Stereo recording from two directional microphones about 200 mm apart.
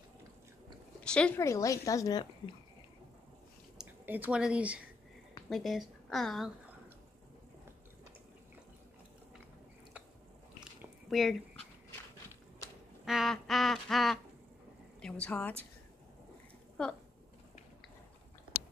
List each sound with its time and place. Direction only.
1.0 s speech: 5° left (ahead or behind)
3.7 s a woman's voice: 10° right (ahead or behind)
10.6 s a sound: centre (ahead or behind)
13.0 s duck: centre (ahead or behind)
15.0 s speech: 5° left (ahead or behind)
16.8 s speech: 5° left (ahead or behind)